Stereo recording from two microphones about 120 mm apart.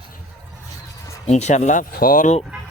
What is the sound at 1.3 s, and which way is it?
Speech, 70° left (ahead or behind).